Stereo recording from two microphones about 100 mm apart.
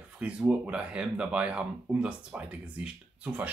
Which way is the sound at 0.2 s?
10° right (ahead or behind).